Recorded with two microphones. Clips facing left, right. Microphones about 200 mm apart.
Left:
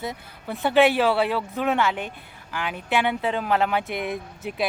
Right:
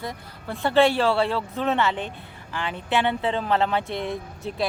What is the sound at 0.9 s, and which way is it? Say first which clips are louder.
Speech: left 1 dB; 5° left (ahead or behind).